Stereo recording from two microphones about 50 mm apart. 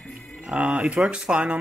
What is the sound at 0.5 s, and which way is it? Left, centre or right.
Speech, centre.